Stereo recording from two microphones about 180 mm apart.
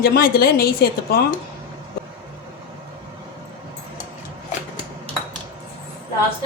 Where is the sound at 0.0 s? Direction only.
60° left (ahead or behind).